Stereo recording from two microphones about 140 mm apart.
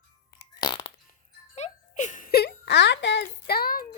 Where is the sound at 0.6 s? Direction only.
35° left (ahead or behind).